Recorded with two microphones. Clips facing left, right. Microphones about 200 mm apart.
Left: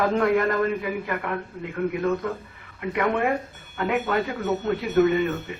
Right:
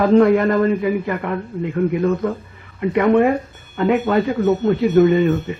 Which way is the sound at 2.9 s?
30° right (ahead or behind).